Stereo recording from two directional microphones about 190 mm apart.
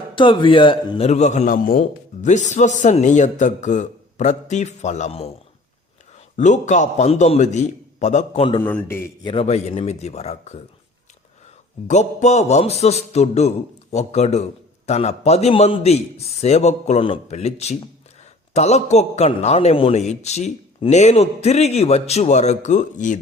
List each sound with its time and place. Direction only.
0.2 s a man's voice: 25° left (ahead or behind)
6.3 s a man's voice: 40° left (ahead or behind)
8.6 s a man's voice: 10° left (ahead or behind)
9.2 s a man's voice: 30° left (ahead or behind)
11.9 s a man's voice: 35° left (ahead or behind)